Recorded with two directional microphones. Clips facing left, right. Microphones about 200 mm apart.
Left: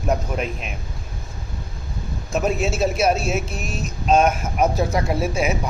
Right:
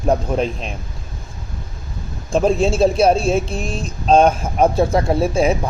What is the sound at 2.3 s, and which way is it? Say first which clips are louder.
Speech: right 6 dB; 30° right (ahead or behind).